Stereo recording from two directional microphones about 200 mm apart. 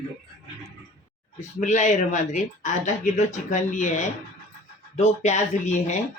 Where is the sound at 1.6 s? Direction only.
35° left (ahead or behind).